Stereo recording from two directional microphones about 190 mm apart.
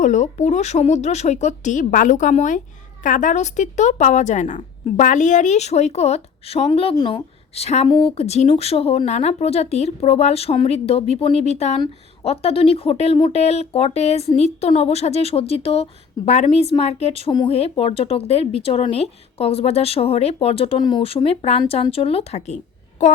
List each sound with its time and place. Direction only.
0.0 s a woman's voice: 40° left (ahead or behind)